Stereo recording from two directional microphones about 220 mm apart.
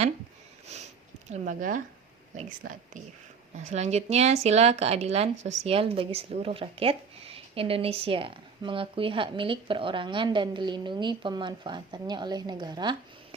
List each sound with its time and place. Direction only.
0.7 s sniff: 30° right (ahead or behind)
1.3 s speech: 35° right (ahead or behind); by 13.0 s 20° right (ahead or behind)